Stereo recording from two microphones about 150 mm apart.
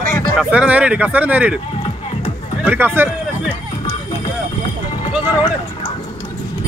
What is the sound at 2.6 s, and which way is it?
Hubbub, 15° right (ahead or behind).